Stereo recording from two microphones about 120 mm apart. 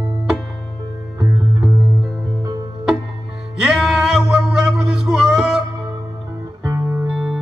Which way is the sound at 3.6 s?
5° right (ahead or behind).